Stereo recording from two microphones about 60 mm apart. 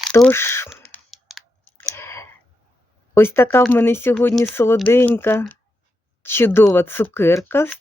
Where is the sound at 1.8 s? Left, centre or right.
Left.